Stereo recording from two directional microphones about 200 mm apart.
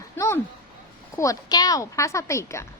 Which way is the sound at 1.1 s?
15° left (ahead or behind).